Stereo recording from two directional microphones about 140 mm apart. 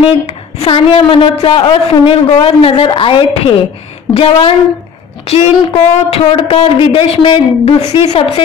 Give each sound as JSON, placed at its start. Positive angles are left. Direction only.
{"t": 0.0, "sound": "a woman's voice", "side_deg": 40}